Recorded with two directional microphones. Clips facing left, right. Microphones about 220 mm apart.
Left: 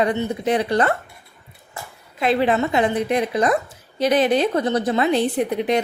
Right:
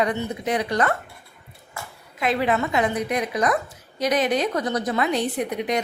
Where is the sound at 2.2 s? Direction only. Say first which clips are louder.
Left 4 dB; 30° left (ahead or behind).